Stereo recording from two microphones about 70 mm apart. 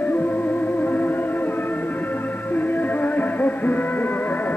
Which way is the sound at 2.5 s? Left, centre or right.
Left.